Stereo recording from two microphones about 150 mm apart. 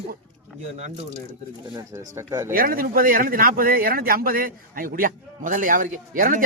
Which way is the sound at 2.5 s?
70° right (ahead or behind).